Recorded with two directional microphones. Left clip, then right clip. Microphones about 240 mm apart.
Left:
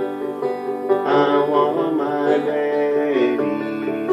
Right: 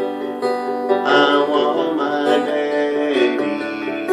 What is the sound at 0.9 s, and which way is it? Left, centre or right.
Music, right.